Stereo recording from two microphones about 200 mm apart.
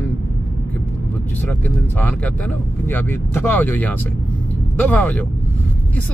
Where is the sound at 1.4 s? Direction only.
10° left (ahead or behind).